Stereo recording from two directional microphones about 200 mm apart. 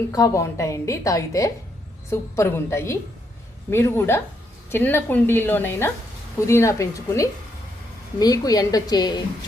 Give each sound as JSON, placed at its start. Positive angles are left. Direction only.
{"t": 0.1, "sound": "a woman's voice", "side_deg": 15}